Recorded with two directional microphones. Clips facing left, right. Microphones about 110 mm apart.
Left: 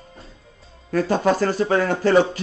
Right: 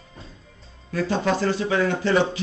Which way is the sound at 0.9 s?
45° left (ahead or behind).